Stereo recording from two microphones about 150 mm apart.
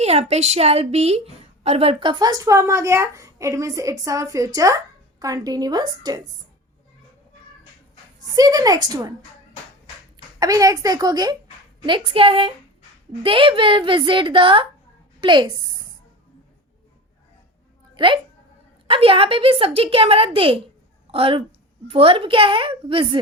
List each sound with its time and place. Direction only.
0.0 s a woman's voice: 45° right (ahead or behind); by 6.2 s 30° right (ahead or behind)
8.4 s a woman's voice: 25° right (ahead or behind)
10.4 s a woman's voice: 25° right (ahead or behind)
17.9 s a woman's voice: 35° right (ahead or behind)